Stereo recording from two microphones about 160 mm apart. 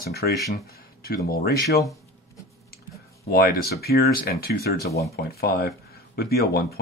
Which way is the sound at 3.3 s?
75° left (ahead or behind).